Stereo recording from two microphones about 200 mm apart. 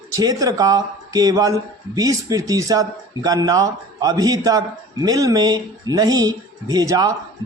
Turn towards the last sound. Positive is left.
turn(degrees=-15)  # may be behind; listen again after turning